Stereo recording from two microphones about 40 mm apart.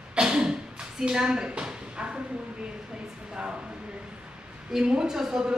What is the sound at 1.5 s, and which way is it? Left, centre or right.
Speech, right.